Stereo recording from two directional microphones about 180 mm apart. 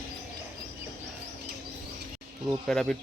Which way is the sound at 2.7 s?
5° left (ahead or behind).